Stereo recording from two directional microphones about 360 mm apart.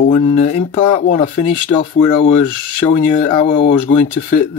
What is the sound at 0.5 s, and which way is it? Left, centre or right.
Speech, centre.